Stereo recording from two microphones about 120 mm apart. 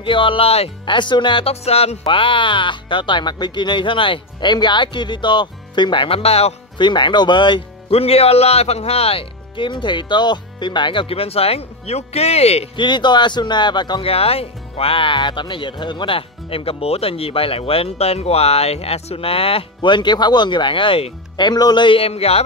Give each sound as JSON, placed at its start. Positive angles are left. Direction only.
{"t": 0.0, "sound": "speech", "side_deg": 45}
{"t": 1.5, "sound": "speech", "side_deg": 60}
{"t": 6.8, "sound": "speech", "side_deg": 40}
{"t": 7.9, "sound": "speech", "side_deg": 55}
{"t": 12.7, "sound": "speech", "side_deg": 40}
{"t": 14.0, "sound": "speech", "side_deg": 55}